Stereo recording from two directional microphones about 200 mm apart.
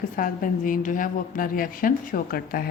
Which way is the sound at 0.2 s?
40° left (ahead or behind).